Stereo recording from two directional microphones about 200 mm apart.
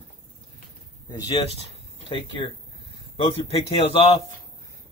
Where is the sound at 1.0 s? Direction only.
20° left (ahead or behind).